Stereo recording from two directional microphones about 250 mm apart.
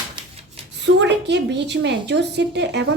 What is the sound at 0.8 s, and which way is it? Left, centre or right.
A woman's voice, right.